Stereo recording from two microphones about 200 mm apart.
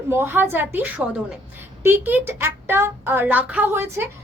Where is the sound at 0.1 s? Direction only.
10° right (ahead or behind).